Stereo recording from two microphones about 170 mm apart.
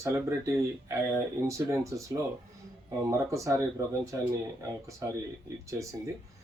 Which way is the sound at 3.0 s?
20° right (ahead or behind).